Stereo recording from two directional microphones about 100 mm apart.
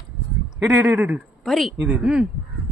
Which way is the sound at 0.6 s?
15° right (ahead or behind).